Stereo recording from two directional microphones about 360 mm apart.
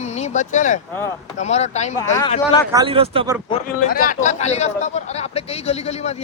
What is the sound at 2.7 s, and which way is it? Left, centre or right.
Speech, centre.